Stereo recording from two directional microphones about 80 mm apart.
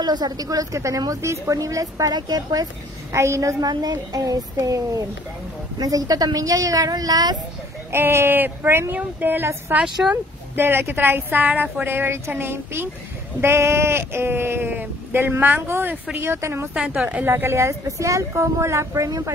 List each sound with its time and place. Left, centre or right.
0.0 s a woman's voice: right
3.1 s a woman's voice: right
7.9 s speech: right
10.0 s speech: centre
10.5 s speech: right
16.9 s speech: right
17.3 s speech: right